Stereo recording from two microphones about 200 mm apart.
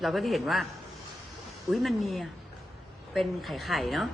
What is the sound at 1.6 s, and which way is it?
Speech, centre (ahead or behind).